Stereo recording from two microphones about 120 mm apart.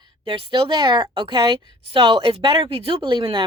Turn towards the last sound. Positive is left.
turn(degrees=-45)  # may be behind; listen again after turning